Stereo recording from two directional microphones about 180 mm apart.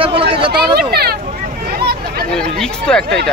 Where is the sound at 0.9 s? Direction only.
60° right (ahead or behind).